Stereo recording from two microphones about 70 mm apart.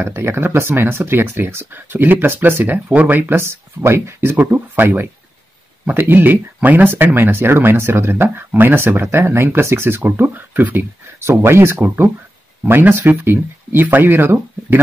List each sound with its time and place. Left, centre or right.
0.0 s speech: right
11.1 s speech: right